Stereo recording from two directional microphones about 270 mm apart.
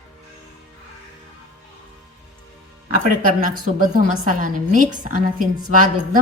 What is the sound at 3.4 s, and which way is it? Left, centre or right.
A woman's voice, right.